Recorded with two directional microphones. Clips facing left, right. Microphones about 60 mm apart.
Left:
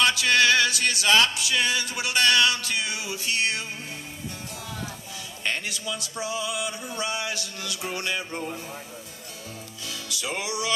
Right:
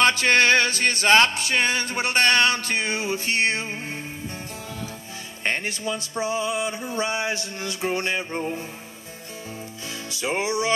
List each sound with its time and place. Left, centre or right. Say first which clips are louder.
0.0 s music: right 3 dB; right
5.4 s music: right 4 dB; right
10.0 s music: right 6 dB; right